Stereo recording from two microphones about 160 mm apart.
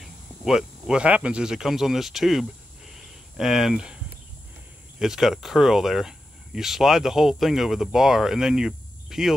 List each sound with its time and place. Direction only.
0.5 s speech: 5° right (ahead or behind)
4.9 s speech: 5° right (ahead or behind)